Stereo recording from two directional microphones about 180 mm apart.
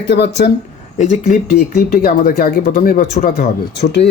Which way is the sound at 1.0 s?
40° left (ahead or behind).